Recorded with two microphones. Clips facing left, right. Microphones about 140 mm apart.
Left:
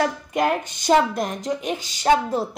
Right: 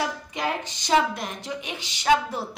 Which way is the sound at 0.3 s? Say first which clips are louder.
Left 7 dB; 50° left (ahead or behind).